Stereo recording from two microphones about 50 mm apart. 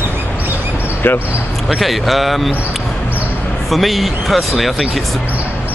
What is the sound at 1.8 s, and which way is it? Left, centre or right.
Speech, centre.